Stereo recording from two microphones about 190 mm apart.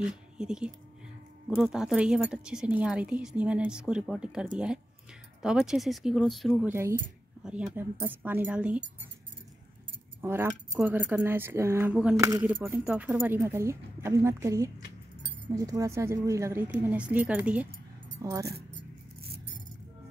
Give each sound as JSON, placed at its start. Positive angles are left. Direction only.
{"t": 0.0, "sound": "speech", "side_deg": -5}
{"t": 6.7, "sound": "speech", "side_deg": -15}
{"t": 10.2, "sound": "speech", "side_deg": -10}